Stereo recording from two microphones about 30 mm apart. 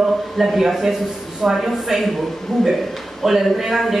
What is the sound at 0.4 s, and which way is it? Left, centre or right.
A woman's voice, centre.